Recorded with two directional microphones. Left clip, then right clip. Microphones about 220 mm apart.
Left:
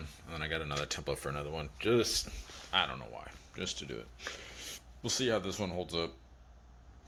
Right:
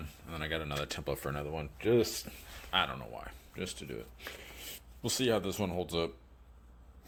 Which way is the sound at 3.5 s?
5° right (ahead or behind).